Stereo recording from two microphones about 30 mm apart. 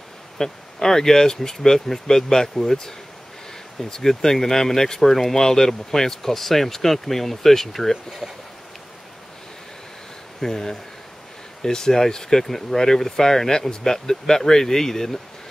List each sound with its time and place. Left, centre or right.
0.4 s speech: centre
3.9 s speech: centre
10.4 s speech: centre